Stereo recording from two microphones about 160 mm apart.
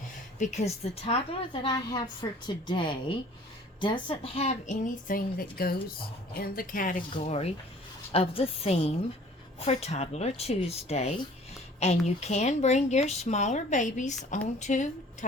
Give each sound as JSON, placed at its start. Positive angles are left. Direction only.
{"t": 0.3, "sound": "speech", "side_deg": 45}
{"t": 2.2, "sound": "a woman's voice", "side_deg": 25}